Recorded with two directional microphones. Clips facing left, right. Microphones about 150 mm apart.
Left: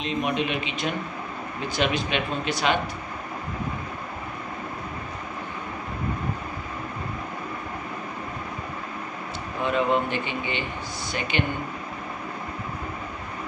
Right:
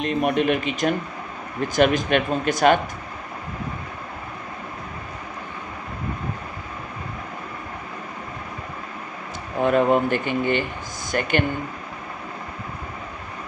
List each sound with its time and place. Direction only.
0.0 s speech: 50° right (ahead or behind)
9.6 s speech: 50° right (ahead or behind)